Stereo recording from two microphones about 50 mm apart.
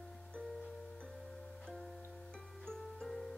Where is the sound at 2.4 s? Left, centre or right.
Centre.